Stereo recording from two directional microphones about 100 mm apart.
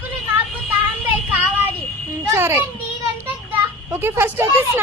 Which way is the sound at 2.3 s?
25° right (ahead or behind).